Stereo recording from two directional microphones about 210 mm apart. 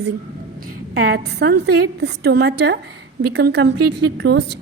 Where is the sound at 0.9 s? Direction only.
45° right (ahead or behind).